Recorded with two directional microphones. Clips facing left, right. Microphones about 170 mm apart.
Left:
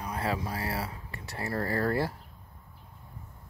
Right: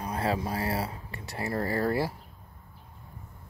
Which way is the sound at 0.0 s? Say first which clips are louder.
Right 3 dB; 30° right (ahead or behind).